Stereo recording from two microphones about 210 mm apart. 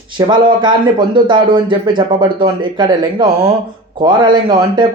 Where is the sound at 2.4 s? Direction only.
20° right (ahead or behind).